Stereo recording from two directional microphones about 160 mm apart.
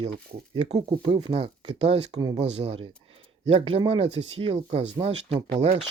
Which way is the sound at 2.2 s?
25° right (ahead or behind).